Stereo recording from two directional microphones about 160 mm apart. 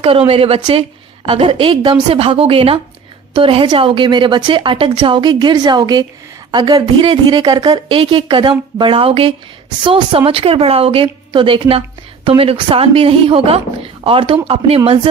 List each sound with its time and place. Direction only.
0.0 s a woman's voice: 35° right (ahead or behind)